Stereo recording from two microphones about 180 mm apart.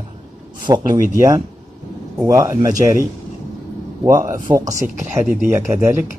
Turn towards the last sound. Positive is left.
turn(degrees=-15)  # may be behind; listen again after turning